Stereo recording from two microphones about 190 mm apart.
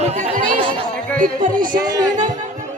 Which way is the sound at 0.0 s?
35° right (ahead or behind).